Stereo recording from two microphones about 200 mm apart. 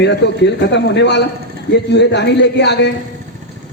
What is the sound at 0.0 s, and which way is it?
A man's voice, 60° left (ahead or behind).